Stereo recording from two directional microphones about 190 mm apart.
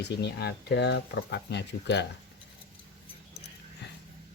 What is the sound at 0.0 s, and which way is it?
Speech, 60° left (ahead or behind).